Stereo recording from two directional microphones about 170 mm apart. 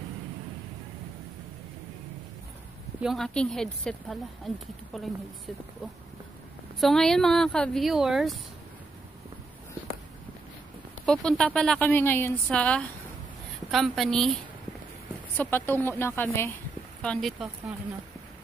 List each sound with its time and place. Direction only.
3.0 s speech: centre (ahead or behind)
6.8 s speech: centre (ahead or behind)
11.1 s a woman's voice: 5° left (ahead or behind)
15.3 s a woman's voice: 10° left (ahead or behind)
17.0 s speech: 5° left (ahead or behind)